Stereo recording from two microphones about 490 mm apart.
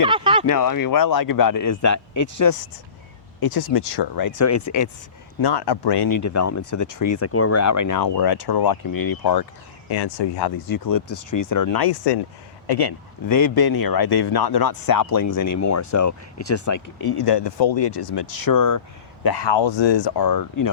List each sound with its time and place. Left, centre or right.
0.0 s a sound: centre
0.4 s a man's voice: left
5.4 s speech: left
6.1 s a man's voice: left
7.2 s speech: left
19.2 s speech: left